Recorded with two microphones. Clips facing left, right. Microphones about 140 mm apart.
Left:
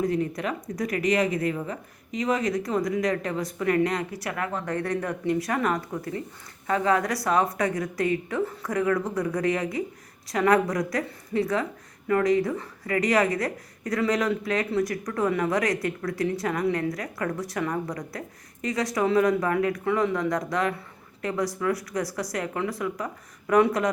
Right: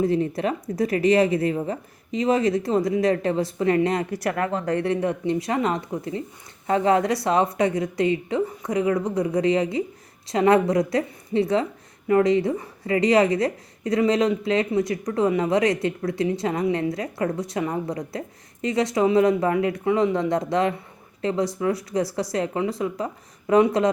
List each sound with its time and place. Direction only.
0.0 s a woman's voice: 30° right (ahead or behind)
4.1 s speech: 50° right (ahead or behind)
4.4 s a woman's voice: 30° right (ahead or behind)